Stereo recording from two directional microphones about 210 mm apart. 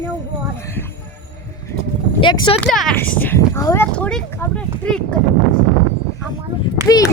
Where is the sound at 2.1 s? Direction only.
25° left (ahead or behind).